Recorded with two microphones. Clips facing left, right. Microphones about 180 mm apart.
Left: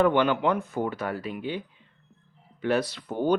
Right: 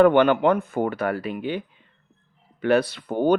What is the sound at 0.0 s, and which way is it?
Speech, 60° right (ahead or behind).